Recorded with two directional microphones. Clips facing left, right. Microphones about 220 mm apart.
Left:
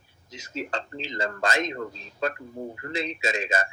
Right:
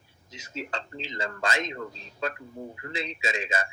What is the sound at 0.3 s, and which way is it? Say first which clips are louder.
A man's voice: left 3 dB; 40° left (ahead or behind).